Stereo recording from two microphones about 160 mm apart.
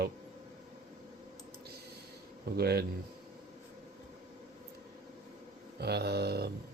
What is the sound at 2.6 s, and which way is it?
Speech, 80° right.